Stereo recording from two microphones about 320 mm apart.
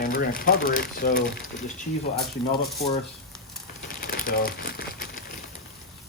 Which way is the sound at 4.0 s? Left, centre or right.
Left.